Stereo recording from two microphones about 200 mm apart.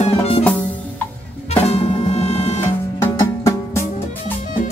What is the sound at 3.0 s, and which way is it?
Music, 15° left (ahead or behind).